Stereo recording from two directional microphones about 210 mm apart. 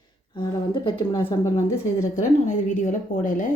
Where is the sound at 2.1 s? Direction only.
35° left (ahead or behind).